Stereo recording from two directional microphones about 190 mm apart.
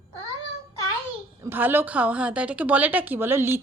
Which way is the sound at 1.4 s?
10° right (ahead or behind).